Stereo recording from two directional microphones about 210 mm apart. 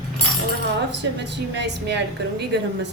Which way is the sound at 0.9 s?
55° right (ahead or behind).